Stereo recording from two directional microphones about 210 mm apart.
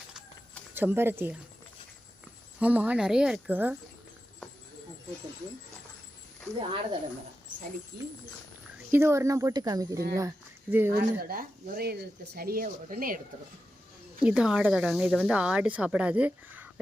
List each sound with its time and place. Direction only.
0.1 s a sound: 5° right (ahead or behind)
2.6 s speech: 5° right (ahead or behind)
7.9 s speech: 45° right (ahead or behind)
8.9 s speech: 10° right (ahead or behind)
10.9 s speech: 45° right (ahead or behind)
14.2 s speech: 5° right (ahead or behind)